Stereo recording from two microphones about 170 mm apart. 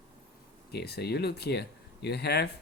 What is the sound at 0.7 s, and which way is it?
Speech, 70° left (ahead or behind).